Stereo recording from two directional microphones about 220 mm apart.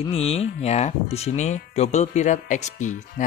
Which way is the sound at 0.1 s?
30° left (ahead or behind).